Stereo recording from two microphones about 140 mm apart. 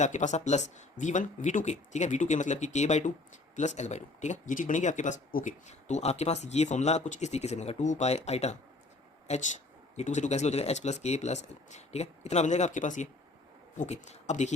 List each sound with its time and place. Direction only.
0.0 s speech: 60° left (ahead or behind)